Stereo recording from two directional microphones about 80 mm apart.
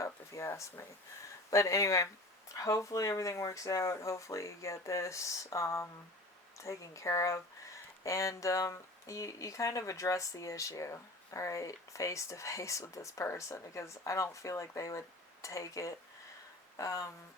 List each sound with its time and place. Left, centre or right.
0.0 s speech: left